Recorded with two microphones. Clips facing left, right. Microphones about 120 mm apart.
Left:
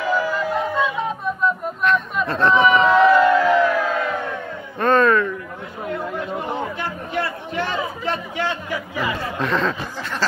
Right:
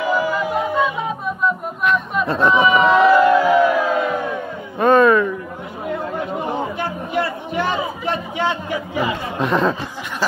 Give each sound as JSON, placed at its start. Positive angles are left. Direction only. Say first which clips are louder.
{"t": 0.0, "sound": "music", "louder": "right 2 dB", "side_deg": -15}
{"t": 1.4, "sound": "chatter", "louder": "right 1 dB", "side_deg": -5}
{"t": 3.2, "sound": "crowd", "louder": "right 2 dB", "side_deg": -15}
{"t": 6.1, "sound": "speech", "louder": "right 2 dB", "side_deg": -15}